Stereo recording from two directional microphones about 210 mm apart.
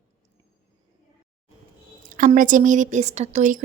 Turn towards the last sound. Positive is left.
turn(degrees=-35)  # may be behind; listen again after turning